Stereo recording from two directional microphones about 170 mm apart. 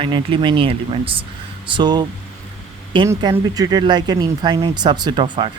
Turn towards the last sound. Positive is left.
turn(degrees=-30)  # may be behind; listen again after turning